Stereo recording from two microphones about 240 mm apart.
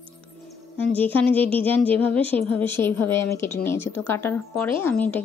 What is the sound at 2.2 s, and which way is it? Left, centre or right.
Speech, right.